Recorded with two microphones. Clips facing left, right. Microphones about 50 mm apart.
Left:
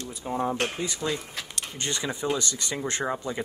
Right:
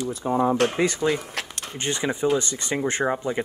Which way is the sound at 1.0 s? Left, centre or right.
Right.